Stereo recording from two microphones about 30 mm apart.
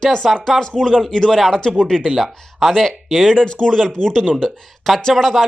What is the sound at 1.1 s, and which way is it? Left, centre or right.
Speech, centre.